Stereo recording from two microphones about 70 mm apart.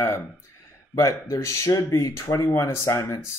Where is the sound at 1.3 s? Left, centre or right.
Left.